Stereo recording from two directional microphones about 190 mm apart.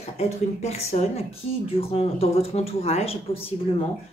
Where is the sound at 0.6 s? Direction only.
35° left (ahead or behind).